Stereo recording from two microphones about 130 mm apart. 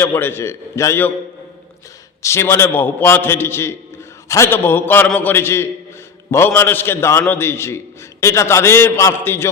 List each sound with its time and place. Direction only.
0.0 s a man's voice: 15° left (ahead or behind)
2.2 s a man's voice: 20° left (ahead or behind)